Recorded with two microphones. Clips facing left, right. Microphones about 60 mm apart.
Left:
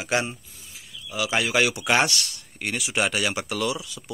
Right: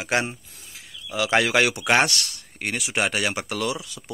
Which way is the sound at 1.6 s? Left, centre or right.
Right.